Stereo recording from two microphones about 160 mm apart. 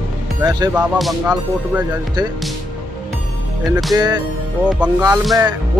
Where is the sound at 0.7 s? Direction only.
Centre (ahead or behind).